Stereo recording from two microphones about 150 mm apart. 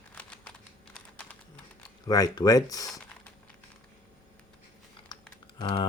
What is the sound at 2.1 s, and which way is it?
Speech, 25° left (ahead or behind).